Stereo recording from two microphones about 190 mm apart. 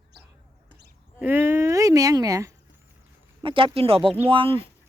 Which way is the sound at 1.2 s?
10° right (ahead or behind).